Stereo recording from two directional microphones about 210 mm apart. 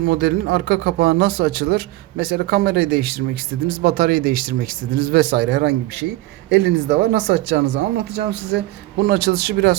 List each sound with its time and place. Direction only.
0.0 s speech: 50° right (ahead or behind)